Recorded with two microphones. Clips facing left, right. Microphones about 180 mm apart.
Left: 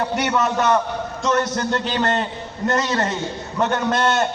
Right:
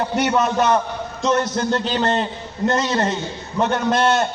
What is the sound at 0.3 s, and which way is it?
A man's voice, 15° right (ahead or behind).